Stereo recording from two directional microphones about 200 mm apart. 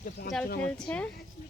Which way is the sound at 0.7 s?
5° left (ahead or behind).